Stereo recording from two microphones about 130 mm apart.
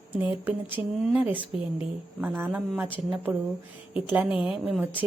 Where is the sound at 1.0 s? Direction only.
5° right (ahead or behind).